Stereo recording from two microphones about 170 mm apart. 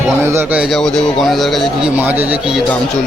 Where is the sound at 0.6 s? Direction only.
Centre (ahead or behind).